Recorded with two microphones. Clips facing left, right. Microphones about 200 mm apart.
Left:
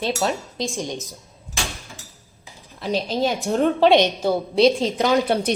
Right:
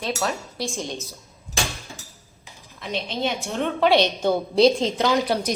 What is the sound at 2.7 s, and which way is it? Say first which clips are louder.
A woman's voice: left 6 dB; 35° left (ahead or behind).